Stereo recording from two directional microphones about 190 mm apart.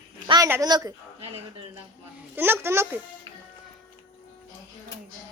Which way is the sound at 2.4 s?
10° right (ahead or behind).